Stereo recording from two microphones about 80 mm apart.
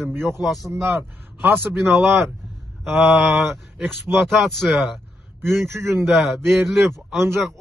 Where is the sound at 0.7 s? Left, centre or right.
Right.